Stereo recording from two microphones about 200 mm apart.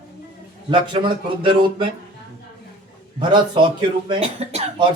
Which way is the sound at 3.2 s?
25° right (ahead or behind).